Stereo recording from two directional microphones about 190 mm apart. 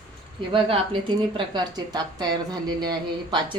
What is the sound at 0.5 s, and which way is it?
A woman's voice, 25° right (ahead or behind).